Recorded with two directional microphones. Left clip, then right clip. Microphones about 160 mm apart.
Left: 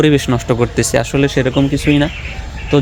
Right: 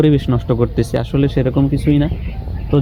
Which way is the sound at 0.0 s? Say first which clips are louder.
Left 3 dB; 20° left (ahead or behind).